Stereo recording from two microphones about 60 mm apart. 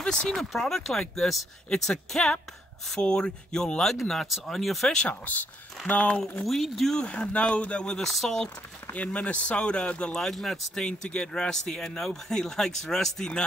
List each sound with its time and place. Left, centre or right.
0.0 s speech: centre
4.9 s speech: left
6.4 s speech: centre
7.0 s speech: centre
8.0 s speech: centre
8.9 s speech: left
10.1 s speech: centre